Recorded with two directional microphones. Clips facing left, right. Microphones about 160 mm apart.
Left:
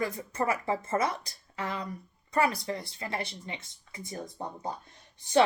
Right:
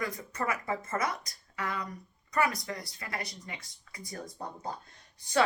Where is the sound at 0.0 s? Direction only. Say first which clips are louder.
Left 4 dB; 30° left (ahead or behind).